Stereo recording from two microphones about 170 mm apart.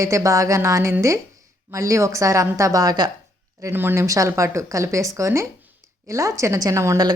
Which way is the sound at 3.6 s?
10° right (ahead or behind).